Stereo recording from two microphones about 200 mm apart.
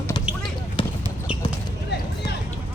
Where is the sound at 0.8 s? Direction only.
25° left (ahead or behind).